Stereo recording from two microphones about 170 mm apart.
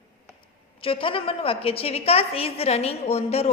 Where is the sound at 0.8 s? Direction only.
30° left (ahead or behind).